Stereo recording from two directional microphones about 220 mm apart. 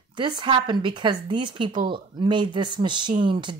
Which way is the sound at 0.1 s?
20° right (ahead or behind).